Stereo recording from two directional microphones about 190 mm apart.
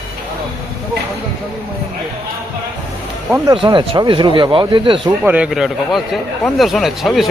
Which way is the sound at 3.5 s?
25° right (ahead or behind).